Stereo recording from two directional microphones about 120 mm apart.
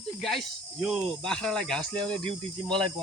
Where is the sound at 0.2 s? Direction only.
Centre (ahead or behind).